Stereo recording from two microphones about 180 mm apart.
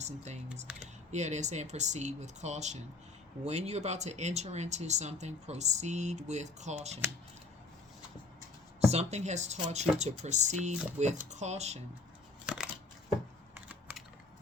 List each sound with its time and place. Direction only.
0.0 s speech: 40° right (ahead or behind)
0.7 s speech: 5° right (ahead or behind)
1.1 s speech: 40° right (ahead or behind)
8.8 s speech: 35° right (ahead or behind)
12.5 s crushing: 5° right (ahead or behind)
13.5 s computer keyboard: 10° right (ahead or behind)